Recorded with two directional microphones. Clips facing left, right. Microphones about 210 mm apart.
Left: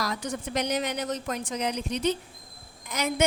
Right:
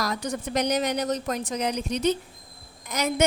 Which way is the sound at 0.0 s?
40° right (ahead or behind).